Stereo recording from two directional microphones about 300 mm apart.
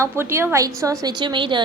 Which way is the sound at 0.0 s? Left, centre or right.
Centre.